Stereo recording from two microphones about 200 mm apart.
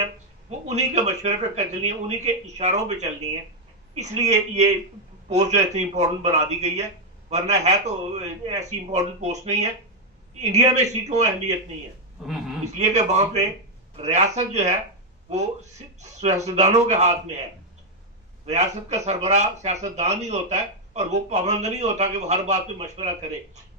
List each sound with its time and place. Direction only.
0.7 s speech: 35° right (ahead or behind)
12.6 s speech: 35° right (ahead or behind)
18.4 s speech: 35° right (ahead or behind)